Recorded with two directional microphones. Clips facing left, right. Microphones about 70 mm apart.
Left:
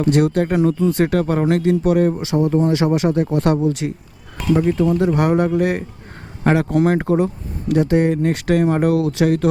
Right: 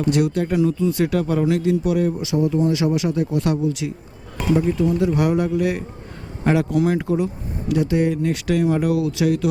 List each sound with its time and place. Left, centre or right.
0.0 s speech: left